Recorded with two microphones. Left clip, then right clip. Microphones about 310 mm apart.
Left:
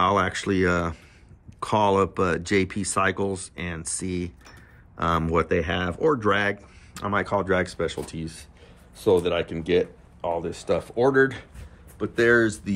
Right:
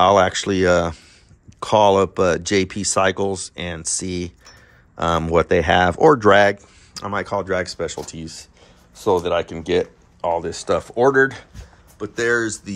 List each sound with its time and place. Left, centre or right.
0.0 s speech: centre